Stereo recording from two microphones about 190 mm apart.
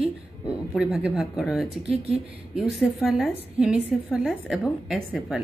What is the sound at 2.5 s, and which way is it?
Speech, centre (ahead or behind).